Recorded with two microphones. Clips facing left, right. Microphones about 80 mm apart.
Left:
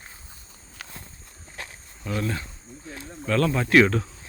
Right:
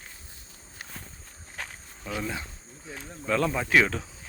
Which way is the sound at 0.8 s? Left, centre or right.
Left.